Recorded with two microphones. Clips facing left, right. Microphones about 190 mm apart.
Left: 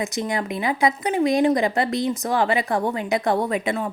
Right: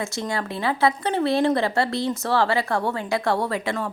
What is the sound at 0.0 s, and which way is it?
Speech, 20° left (ahead or behind).